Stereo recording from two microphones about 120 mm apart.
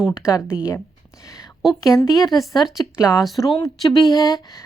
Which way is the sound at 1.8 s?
30° left (ahead or behind).